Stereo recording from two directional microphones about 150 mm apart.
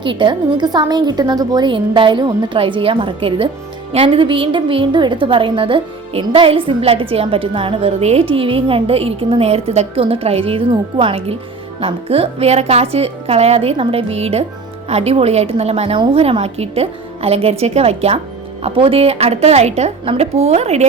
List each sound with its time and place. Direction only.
0.0 s a woman's voice: 35° right (ahead or behind)